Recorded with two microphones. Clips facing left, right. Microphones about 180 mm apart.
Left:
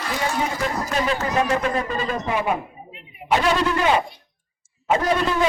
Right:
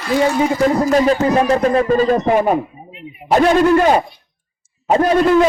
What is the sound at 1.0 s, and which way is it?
Speech, 40° right (ahead or behind).